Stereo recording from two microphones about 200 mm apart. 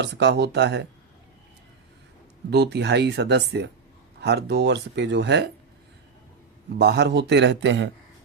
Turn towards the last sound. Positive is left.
turn(degrees=-65)  # may be behind; listen again after turning